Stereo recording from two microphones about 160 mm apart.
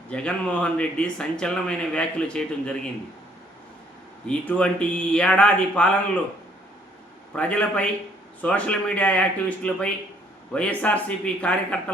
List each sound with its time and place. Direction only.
0.1 s speech: 5° left (ahead or behind)
4.3 s speech: 5° left (ahead or behind)
7.3 s speech: 10° left (ahead or behind)